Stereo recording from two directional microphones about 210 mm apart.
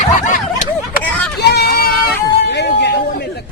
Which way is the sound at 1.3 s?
50° left (ahead or behind).